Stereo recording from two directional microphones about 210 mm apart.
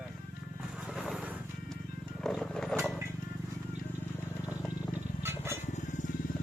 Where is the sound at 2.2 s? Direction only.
5° left (ahead or behind).